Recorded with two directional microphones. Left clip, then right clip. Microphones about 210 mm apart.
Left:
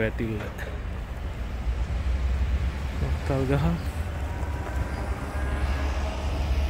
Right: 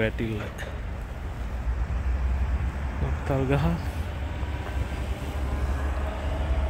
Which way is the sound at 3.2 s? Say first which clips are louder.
Right 1 dB; 5° right (ahead or behind).